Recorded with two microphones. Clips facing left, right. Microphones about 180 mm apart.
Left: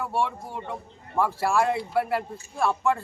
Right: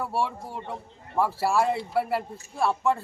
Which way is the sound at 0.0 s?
5° right (ahead or behind).